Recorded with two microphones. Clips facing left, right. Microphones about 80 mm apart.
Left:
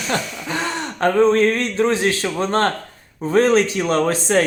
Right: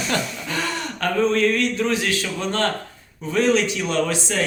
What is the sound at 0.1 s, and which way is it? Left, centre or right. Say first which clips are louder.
Speech: left 5 dB; left.